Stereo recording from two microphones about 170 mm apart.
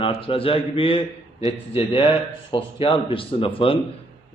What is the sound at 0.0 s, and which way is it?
A man's voice, 30° left (ahead or behind).